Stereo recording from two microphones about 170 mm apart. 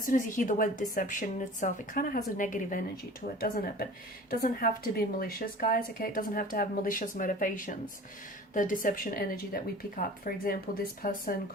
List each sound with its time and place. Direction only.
0.0 s a woman's voice: 50° left (ahead or behind)